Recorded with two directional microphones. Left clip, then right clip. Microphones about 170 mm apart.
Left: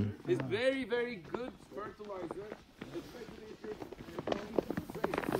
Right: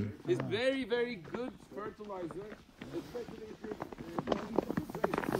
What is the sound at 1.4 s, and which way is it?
Speech, 45° right (ahead or behind).